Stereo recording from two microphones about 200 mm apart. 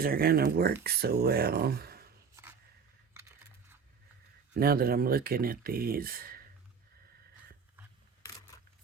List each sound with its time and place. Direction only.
0.0 s speech: 50° right (ahead or behind)
4.5 s speech: 50° right (ahead or behind)